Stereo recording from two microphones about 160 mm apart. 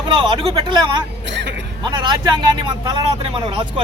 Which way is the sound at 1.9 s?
30° right (ahead or behind).